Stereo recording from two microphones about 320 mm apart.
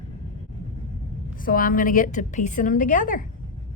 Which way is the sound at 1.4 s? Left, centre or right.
Left.